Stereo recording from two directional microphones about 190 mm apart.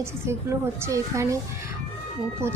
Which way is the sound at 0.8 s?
15° right (ahead or behind).